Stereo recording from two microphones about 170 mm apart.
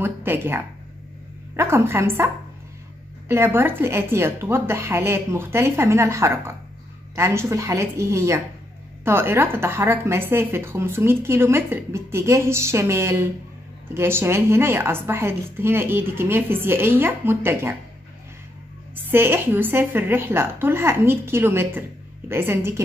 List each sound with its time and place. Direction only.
0.0 s a sound: 15° right (ahead or behind)
1.6 s speech: 15° right (ahead or behind)
19.0 s speech: 15° right (ahead or behind)